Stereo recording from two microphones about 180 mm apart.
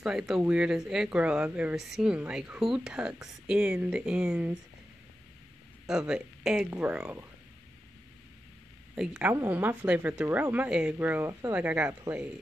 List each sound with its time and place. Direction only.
0.0 s speech: 5° right (ahead or behind)
5.9 s speech: 5° right (ahead or behind)
9.1 s a woman's voice: 15° right (ahead or behind)